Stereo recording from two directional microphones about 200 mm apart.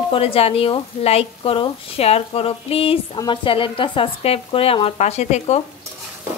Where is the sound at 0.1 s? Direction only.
30° left (ahead or behind).